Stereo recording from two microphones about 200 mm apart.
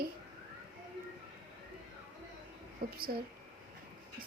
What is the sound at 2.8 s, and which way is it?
Speech, 45° right (ahead or behind).